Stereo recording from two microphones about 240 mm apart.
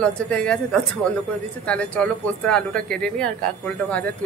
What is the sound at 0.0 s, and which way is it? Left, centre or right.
Speech, centre.